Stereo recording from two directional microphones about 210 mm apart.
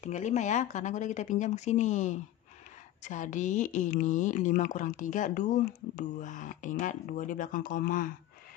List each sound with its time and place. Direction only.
0.0 s speech: 35° left (ahead or behind)